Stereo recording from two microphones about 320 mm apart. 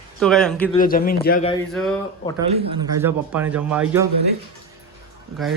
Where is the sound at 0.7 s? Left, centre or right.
Left.